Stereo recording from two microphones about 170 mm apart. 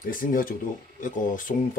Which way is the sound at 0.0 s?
55° left (ahead or behind).